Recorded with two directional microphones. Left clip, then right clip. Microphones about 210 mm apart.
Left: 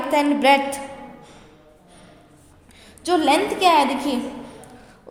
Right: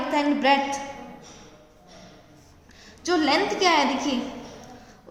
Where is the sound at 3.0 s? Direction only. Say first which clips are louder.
Left 4 dB; 30° left (ahead or behind).